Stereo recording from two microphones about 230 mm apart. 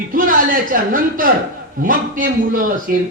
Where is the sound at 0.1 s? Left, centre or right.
Right.